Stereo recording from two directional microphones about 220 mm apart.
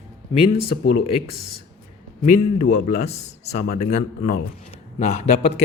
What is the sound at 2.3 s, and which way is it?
Speech, 35° left (ahead or behind).